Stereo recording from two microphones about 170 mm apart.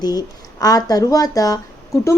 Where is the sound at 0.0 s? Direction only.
25° left (ahead or behind).